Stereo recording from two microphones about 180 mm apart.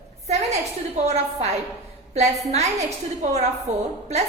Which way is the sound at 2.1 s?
40° right (ahead or behind).